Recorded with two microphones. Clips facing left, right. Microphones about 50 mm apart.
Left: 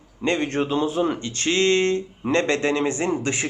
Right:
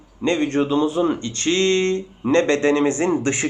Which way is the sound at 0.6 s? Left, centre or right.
Centre.